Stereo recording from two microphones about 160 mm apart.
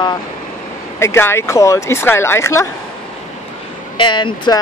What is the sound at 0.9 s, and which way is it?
Speech, 15° left (ahead or behind).